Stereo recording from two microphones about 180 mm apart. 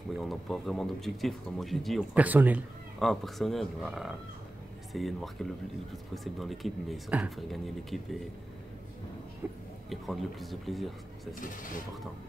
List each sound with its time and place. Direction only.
0.2 s speech: centre (ahead or behind)
3.0 s speech: centre (ahead or behind)
9.4 s speech: 10° right (ahead or behind)
11.3 s speech: 50° left (ahead or behind)